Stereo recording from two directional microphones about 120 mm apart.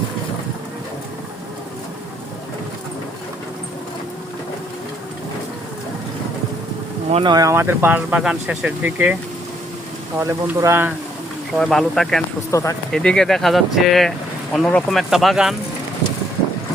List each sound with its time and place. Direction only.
7.3 s speech: 30° right (ahead or behind)
7.5 s speech: 20° right (ahead or behind)
10.2 s speech: 20° right (ahead or behind)
11.5 s speech: 5° left (ahead or behind)
12.5 s speech: 25° left (ahead or behind)
12.9 s speech: 5° left (ahead or behind)